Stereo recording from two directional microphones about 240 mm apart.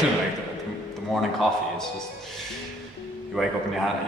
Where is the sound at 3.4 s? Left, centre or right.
Centre.